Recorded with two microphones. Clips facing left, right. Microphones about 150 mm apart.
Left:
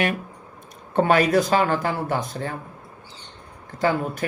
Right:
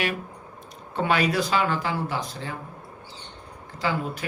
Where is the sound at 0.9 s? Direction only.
45° left (ahead or behind).